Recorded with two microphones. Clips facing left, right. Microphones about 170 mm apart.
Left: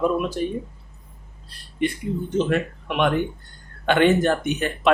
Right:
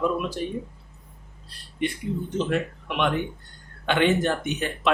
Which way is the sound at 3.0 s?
50° left (ahead or behind).